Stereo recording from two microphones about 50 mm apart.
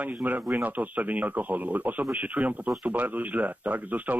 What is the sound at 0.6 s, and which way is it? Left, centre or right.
Speech, right.